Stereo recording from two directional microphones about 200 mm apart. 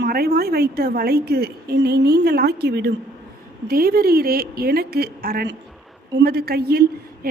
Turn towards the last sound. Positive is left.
turn(degrees=-50)  # may be behind; listen again after turning